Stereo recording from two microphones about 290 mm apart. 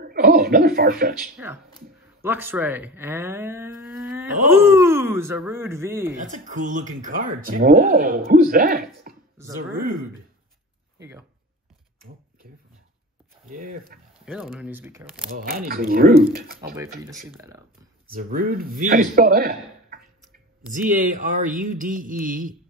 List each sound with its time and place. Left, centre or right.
0.0 s a sound: right
2.2 s speech: centre
6.2 s speech: right
9.4 s speech: centre
11.0 s speech: centre
12.4 s a sound: right
14.2 s speech: centre
15.3 s speech: right
18.1 s speech: right
20.7 s speech: right